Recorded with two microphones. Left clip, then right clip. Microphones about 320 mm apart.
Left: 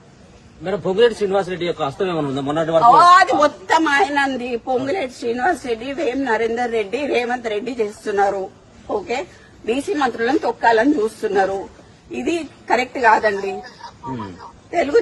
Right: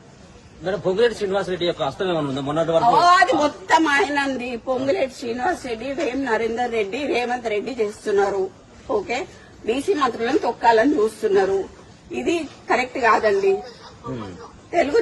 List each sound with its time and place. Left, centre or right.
0.6 s a man's voice: left
2.9 s a woman's voice: centre
9.6 s a woman's voice: centre
14.7 s speech: centre